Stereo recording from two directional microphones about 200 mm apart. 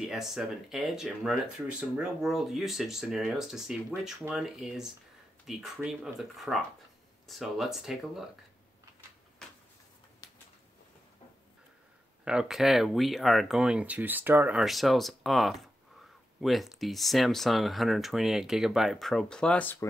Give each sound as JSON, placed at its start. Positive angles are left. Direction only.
{"t": 0.0, "sound": "speech", "side_deg": 0}
{"t": 9.4, "sound": "a sound", "side_deg": 5}
{"t": 12.3, "sound": "speech", "side_deg": -5}